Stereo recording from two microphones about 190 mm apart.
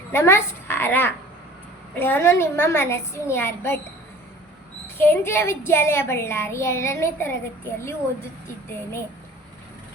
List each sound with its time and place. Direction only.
0.1 s a woman's voice: 15° left (ahead or behind)
4.9 s speech: 10° left (ahead or behind)